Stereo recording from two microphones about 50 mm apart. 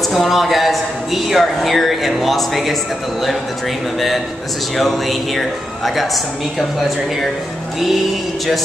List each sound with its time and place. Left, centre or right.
0.1 s speech: centre
4.7 s speech: centre